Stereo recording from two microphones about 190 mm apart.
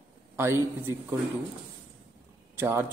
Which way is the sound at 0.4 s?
15° right (ahead or behind).